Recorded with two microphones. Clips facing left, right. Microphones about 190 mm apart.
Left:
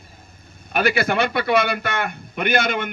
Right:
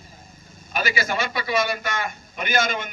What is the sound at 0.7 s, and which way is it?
A man's voice, 60° left (ahead or behind).